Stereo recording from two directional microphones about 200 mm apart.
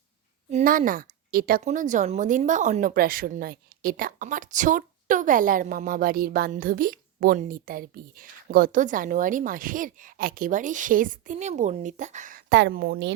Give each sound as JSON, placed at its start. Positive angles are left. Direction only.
{"t": 0.5, "sound": "a woman's voice", "side_deg": -40}
{"t": 12.5, "sound": "speech", "side_deg": -55}